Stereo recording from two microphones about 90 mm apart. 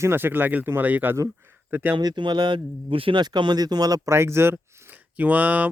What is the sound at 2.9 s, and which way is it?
Speech, 80° right.